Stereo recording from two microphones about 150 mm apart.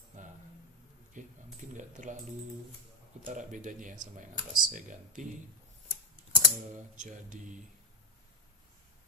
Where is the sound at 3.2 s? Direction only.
60° right (ahead or behind).